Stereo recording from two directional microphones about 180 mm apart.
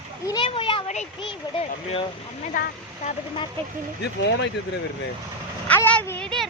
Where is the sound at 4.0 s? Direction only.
70° left (ahead or behind).